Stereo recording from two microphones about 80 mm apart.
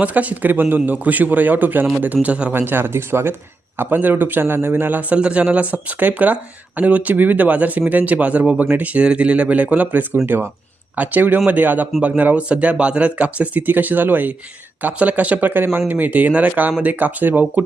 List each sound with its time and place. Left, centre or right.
0.0 s a man's voice: centre